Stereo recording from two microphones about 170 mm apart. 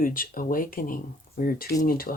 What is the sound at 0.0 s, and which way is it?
Speech, 55° left (ahead or behind).